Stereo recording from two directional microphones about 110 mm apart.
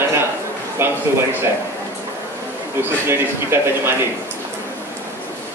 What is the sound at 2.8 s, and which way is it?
A man's voice, 20° right (ahead or behind).